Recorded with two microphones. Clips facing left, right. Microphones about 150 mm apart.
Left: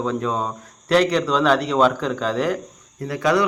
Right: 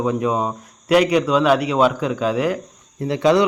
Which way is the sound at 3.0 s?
25° right (ahead or behind).